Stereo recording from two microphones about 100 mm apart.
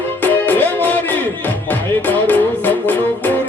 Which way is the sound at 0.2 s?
20° left (ahead or behind).